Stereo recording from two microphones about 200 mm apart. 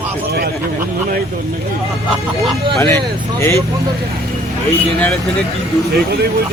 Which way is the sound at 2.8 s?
15° left (ahead or behind).